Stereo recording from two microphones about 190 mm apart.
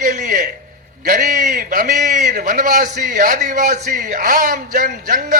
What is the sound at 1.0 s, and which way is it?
A man's voice, 45° right (ahead or behind).